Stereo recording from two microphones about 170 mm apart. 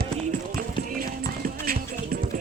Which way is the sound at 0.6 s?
55° right (ahead or behind).